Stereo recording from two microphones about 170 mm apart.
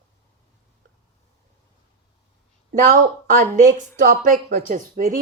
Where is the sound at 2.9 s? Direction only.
50° right (ahead or behind).